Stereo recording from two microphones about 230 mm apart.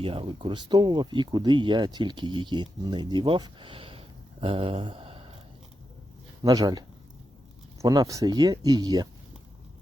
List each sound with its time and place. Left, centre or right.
0.0 s speech: right
6.4 s speech: centre